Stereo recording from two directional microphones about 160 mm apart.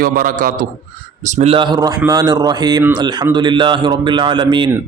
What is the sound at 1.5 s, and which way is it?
Speech, 25° right (ahead or behind).